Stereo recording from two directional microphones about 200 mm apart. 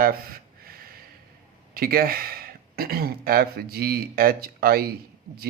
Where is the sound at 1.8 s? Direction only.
45° right (ahead or behind).